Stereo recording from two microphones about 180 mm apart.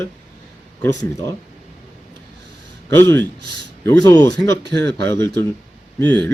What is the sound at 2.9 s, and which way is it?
Speech, 10° left (ahead or behind).